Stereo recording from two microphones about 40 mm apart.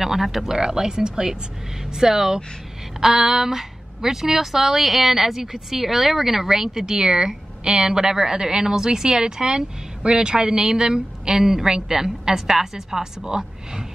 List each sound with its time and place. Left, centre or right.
0.0 s a woman's voice: centre